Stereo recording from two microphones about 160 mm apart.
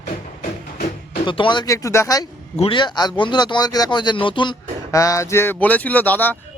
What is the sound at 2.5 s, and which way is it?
Speech, 35° left (ahead or behind).